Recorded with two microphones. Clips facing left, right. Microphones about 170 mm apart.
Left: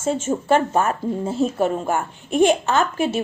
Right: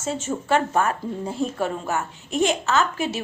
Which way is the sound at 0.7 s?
25° left (ahead or behind).